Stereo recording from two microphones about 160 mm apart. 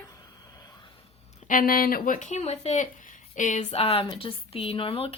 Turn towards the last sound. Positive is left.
turn(degrees=35)  # may be behind; listen again after turning